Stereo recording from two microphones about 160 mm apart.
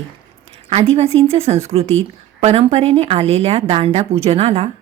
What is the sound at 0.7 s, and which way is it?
A woman's voice, 40° right (ahead or behind).